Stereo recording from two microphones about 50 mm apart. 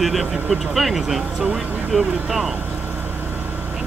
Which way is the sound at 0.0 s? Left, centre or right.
Centre.